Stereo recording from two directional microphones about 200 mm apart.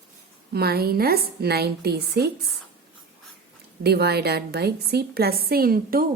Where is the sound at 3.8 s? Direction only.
55° right (ahead or behind).